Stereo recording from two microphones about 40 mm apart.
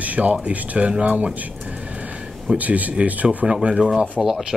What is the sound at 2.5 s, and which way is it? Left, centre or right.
Speech, right.